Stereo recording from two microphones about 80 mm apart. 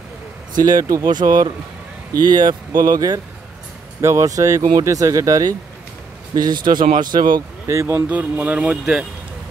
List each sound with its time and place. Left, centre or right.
0.6 s speech: right
4.0 s speech: right
6.3 s speech: right
7.6 s speech: right
8.1 s a man's voice: right